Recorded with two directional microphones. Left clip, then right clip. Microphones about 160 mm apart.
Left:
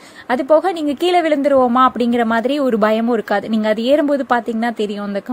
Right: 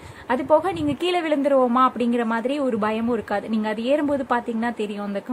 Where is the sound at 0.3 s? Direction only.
30° left (ahead or behind).